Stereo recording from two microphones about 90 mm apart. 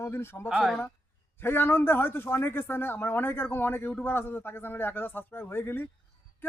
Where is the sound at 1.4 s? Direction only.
25° left (ahead or behind).